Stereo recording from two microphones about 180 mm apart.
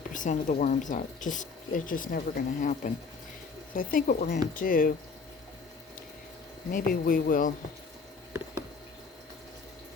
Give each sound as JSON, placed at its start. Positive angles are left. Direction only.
{"t": 0.1, "sound": "speech", "side_deg": 45}
{"t": 6.7, "sound": "speech", "side_deg": 50}